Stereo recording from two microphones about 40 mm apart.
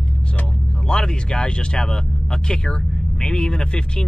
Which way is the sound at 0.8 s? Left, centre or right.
Centre.